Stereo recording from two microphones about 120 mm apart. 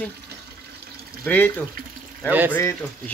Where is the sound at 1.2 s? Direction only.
15° left (ahead or behind).